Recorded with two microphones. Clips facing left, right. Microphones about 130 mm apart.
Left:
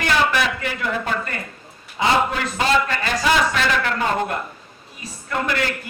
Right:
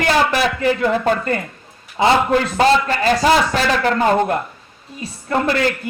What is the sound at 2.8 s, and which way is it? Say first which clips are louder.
A man's voice: right 6 dB; 35° right (ahead or behind).